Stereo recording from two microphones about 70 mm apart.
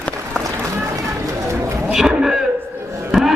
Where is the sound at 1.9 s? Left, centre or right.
Centre.